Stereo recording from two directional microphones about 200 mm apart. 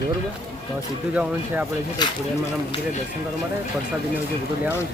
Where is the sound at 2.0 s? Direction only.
20° left (ahead or behind).